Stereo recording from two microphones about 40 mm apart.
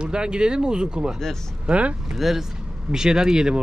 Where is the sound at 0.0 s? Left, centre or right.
Right.